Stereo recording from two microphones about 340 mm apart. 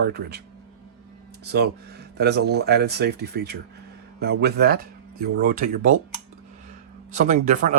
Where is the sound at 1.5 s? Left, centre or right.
Right.